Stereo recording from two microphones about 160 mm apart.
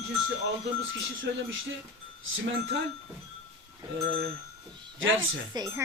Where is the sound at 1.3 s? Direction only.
90° right.